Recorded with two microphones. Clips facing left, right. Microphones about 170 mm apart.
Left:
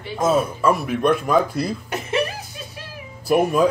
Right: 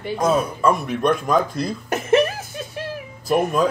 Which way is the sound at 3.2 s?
10° left (ahead or behind).